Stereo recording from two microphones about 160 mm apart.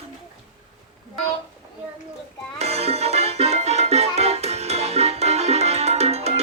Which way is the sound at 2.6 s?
40° right (ahead or behind).